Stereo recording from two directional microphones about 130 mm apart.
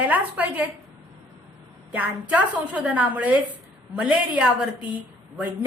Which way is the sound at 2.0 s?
10° right (ahead or behind).